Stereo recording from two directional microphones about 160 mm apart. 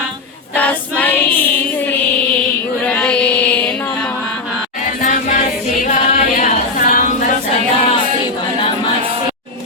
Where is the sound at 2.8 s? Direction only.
5° left (ahead or behind).